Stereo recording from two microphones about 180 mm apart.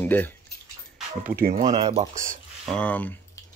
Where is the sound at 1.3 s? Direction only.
55° right (ahead or behind).